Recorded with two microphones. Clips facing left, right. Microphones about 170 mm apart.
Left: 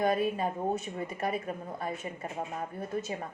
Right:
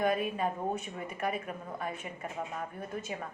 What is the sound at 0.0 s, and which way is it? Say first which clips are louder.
A woman's voice: left 2 dB; 35° left (ahead or behind).